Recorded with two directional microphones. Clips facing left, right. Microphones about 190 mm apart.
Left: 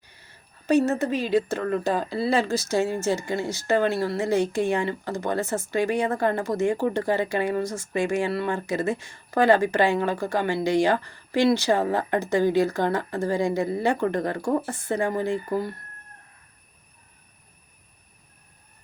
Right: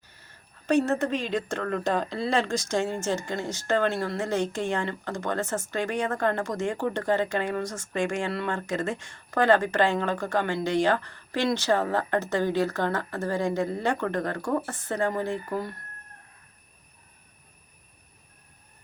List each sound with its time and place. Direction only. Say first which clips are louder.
0.7 s speech: left 2 dB; 5° left (ahead or behind)